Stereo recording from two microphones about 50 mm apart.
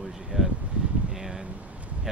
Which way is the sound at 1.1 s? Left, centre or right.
Centre.